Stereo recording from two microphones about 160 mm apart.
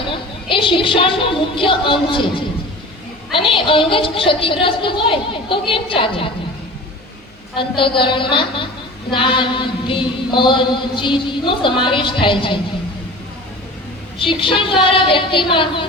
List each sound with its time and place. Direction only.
0.1 s a woman's voice: 30° left (ahead or behind)
7.5 s a woman's voice: 30° left (ahead or behind)
14.2 s a woman's voice: 30° left (ahead or behind)